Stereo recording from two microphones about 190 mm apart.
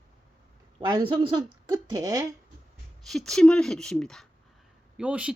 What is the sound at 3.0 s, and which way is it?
Speech, centre (ahead or behind).